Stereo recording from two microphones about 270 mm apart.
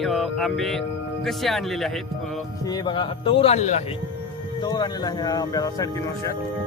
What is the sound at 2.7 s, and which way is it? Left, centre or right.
A man's voice, centre.